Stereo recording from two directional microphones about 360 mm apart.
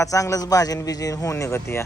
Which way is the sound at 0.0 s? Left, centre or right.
Centre.